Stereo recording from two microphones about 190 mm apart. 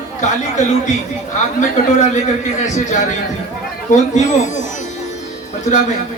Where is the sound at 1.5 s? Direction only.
40° left (ahead or behind).